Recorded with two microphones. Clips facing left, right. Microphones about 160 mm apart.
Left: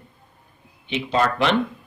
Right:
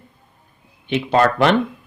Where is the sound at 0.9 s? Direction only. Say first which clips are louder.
Right 5 dB; 55° right (ahead or behind).